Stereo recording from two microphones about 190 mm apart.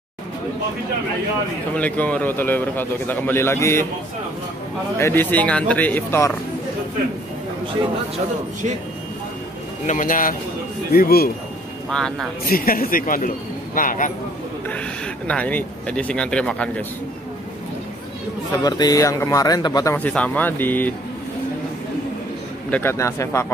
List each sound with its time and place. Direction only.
1.8 s speech: 10° left (ahead or behind)
4.9 s speech: 10° left (ahead or behind)
9.8 s speech: 45° left (ahead or behind)
11.9 s speech: 5° left (ahead or behind)
12.4 s speech: 50° left (ahead or behind)
15.2 s speech: 5° left (ahead or behind)
18.5 s speech: 20° left (ahead or behind)
22.7 s speech: 10° left (ahead or behind)